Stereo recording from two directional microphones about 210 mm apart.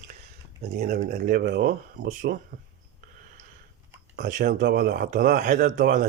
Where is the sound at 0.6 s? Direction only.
45° right (ahead or behind).